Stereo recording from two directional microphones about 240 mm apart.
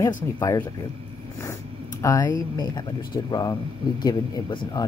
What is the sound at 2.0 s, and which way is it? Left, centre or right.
Speech, centre.